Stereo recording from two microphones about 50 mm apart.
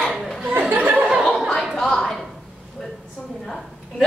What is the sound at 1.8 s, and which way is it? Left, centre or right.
Speech, centre.